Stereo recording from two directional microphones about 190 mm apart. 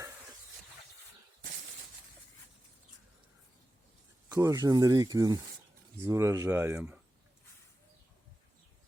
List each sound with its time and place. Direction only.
4.3 s speech: 15° right (ahead or behind)